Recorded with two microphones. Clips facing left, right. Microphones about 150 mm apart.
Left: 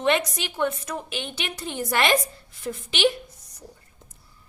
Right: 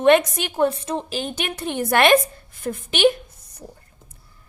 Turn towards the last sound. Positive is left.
turn(degrees=-50)  # may be behind; listen again after turning